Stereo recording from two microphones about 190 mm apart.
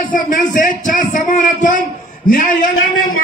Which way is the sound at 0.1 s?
45° left (ahead or behind).